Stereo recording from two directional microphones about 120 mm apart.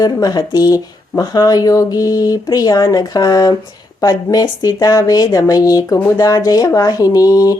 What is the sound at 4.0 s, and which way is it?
Speech, 30° left (ahead or behind).